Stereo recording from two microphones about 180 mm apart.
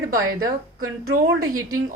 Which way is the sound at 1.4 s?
20° right (ahead or behind).